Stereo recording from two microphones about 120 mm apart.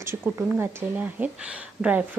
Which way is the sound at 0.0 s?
20° right (ahead or behind).